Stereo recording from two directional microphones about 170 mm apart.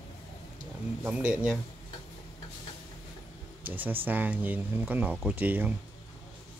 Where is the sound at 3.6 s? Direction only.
10° right (ahead or behind).